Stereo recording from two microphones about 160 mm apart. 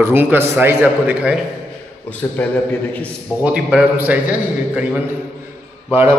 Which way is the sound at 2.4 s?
10° left (ahead or behind).